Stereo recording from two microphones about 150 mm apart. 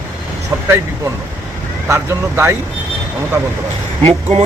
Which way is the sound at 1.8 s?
15° right (ahead or behind).